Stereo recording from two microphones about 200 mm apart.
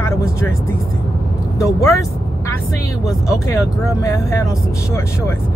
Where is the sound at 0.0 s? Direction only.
15° left (ahead or behind).